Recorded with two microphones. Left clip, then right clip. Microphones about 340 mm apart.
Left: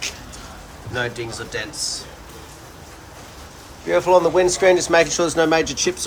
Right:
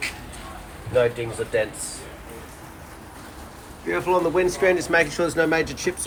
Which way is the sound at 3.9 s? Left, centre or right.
Centre.